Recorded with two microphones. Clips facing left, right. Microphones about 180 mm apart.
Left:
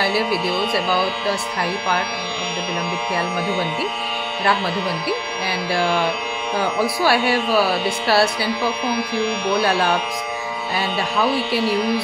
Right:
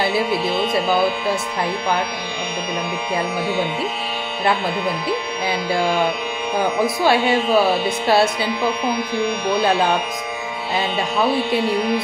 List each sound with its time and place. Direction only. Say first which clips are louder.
6.8 s speech: right 1 dB; 20° right (ahead or behind)
9.6 s speech: right 2 dB; 20° right (ahead or behind)